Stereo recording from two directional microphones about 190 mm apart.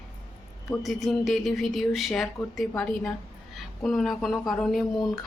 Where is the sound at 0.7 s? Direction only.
Centre (ahead or behind).